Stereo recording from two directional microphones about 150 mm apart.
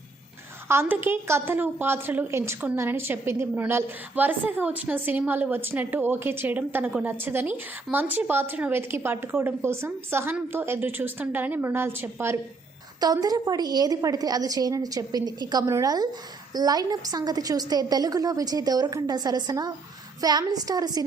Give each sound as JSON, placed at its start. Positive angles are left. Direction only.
{"t": 0.7, "sound": "a woman's voice", "side_deg": -15}